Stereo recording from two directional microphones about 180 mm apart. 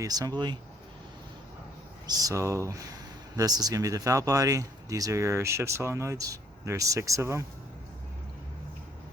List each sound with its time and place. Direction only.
0.0 s speech: 20° right (ahead or behind)
2.0 s speech: 20° right (ahead or behind)